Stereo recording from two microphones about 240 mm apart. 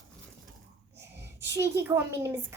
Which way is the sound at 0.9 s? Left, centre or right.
Right.